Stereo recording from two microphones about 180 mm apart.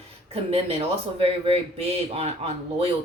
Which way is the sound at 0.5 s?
35° right (ahead or behind).